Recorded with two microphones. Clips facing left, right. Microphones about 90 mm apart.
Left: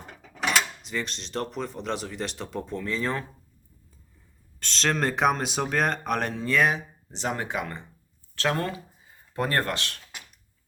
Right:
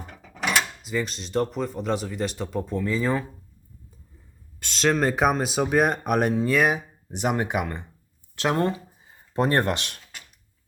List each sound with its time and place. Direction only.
0.8 s speech: 5° right (ahead or behind)
4.6 s speech: 10° right (ahead or behind)